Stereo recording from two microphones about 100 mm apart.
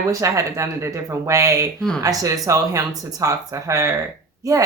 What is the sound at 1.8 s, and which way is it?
Speech, 5° left (ahead or behind).